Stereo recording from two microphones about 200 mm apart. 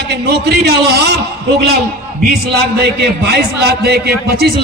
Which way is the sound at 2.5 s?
55° right (ahead or behind).